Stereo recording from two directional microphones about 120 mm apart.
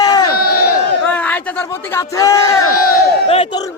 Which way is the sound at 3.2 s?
55° left (ahead or behind).